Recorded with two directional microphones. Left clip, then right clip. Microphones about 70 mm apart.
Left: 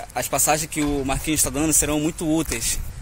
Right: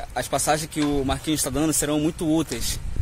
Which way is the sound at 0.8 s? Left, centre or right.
Right.